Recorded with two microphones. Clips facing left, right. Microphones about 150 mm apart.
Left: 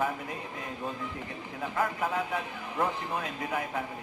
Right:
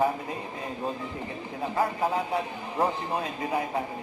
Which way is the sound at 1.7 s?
30° right (ahead or behind).